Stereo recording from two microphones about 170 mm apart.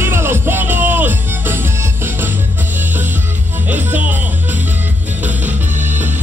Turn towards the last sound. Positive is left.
turn(degrees=-10)  # may be behind; listen again after turning